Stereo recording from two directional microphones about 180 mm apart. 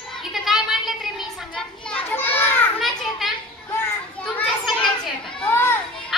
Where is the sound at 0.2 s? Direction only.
Centre (ahead or behind).